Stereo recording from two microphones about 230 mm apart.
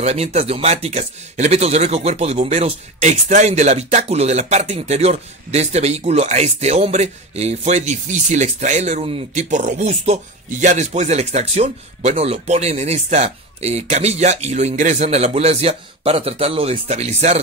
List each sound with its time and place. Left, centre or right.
0.0 s speech: right